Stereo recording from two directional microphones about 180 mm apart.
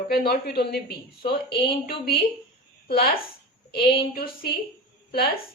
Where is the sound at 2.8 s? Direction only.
60° left (ahead or behind).